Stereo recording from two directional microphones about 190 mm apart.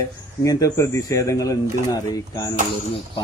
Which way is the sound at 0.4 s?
15° left (ahead or behind).